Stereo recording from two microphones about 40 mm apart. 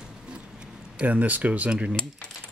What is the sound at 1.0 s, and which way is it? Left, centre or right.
Speech, right.